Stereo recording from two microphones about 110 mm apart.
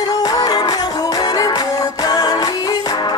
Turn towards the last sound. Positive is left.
turn(degrees=40)  # may be behind; listen again after turning